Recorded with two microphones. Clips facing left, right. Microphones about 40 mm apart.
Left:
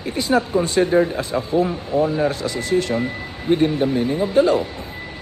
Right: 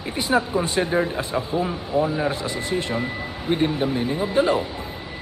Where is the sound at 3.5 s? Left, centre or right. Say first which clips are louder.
Left 4 dB; centre.